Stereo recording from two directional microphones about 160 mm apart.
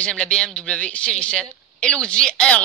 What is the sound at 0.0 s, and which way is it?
A woman's voice, 5° left (ahead or behind).